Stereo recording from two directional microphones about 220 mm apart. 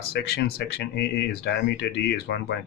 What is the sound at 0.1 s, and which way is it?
Speech, 45° left (ahead or behind).